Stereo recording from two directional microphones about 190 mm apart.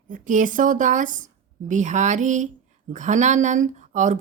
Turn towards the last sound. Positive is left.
turn(degrees=-40)  # may be behind; listen again after turning